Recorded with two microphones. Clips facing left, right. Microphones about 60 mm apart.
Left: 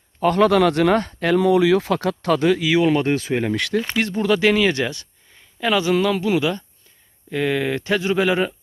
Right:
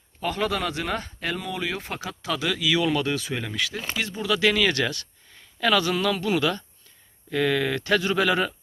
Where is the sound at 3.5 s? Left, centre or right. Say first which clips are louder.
Left 8 dB; left.